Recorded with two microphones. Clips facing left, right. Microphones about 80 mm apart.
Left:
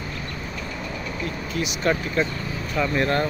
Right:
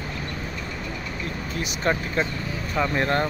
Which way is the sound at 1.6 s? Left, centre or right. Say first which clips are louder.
Left 2 dB; right.